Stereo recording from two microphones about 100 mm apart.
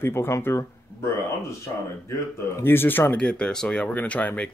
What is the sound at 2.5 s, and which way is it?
Speech, 20° left (ahead or behind).